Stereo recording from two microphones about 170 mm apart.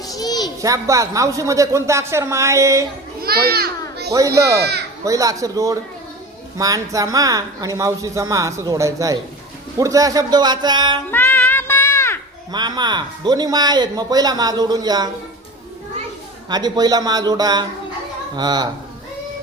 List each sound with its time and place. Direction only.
0.0 s a sound: 20° left (ahead or behind)
0.6 s speech: 20° right (ahead or behind)
3.2 s a child's voice: 65° right (ahead or behind)
4.4 s speech: 20° right (ahead or behind)
11.1 s music: 10° left (ahead or behind)
12.5 s speech: 25° right (ahead or behind)
16.5 s speech: 25° right (ahead or behind)